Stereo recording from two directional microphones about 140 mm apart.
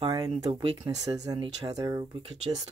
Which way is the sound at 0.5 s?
40° right (ahead or behind).